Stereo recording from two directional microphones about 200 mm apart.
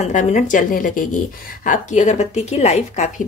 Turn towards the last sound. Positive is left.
turn(degrees=35)  # may be behind; listen again after turning